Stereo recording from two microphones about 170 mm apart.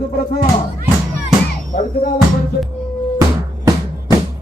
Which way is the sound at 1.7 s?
50° left (ahead or behind).